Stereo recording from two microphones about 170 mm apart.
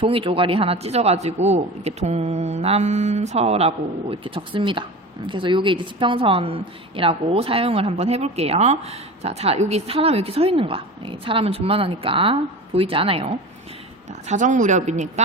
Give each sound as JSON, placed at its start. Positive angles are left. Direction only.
{"t": 0.0, "sound": "a man's voice", "side_deg": -30}
{"t": 14.3, "sound": "speech", "side_deg": -45}